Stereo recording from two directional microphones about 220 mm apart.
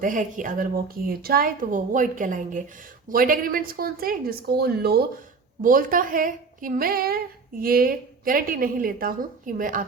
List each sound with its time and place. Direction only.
0.0 s a woman's voice: 35° right (ahead or behind)